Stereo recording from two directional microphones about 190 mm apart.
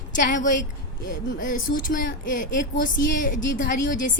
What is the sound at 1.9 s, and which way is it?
Speech, 45° left (ahead or behind).